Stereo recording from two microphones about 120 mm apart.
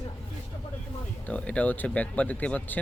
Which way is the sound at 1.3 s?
10° left (ahead or behind).